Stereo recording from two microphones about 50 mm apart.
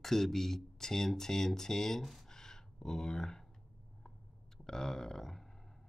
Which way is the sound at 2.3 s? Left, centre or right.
Centre.